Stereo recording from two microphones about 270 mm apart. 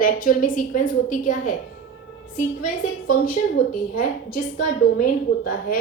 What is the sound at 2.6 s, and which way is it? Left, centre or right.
A woman's voice, left.